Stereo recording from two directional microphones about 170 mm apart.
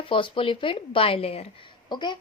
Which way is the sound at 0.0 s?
30° left (ahead or behind).